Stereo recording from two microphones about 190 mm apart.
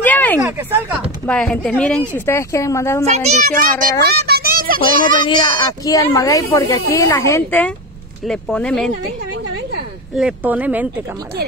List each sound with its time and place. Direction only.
0.0 s a sound: 10° left (ahead or behind)
0.5 s speech: 10° right (ahead or behind)
1.2 s speech: 5° left (ahead or behind)
3.1 s a child's voice: 40° right (ahead or behind)
4.0 s a child's voice: 55° right (ahead or behind)
5.2 s speech: 25° left (ahead or behind); by 8.9 s 5° left (ahead or behind)
10.1 s speech: 5° right (ahead or behind)